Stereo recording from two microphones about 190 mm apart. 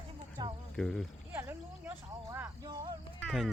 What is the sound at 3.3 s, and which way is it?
Speech, centre (ahead or behind).